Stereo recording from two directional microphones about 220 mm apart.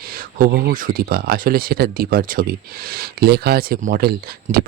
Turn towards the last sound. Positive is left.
turn(degrees=-45)  # may be behind; listen again after turning